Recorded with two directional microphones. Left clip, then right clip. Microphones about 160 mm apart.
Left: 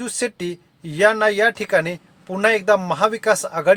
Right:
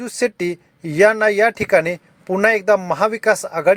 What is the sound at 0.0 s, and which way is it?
Speech, 30° right (ahead or behind).